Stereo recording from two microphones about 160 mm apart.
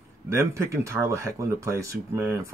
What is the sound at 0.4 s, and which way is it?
Speech, 15° right (ahead or behind).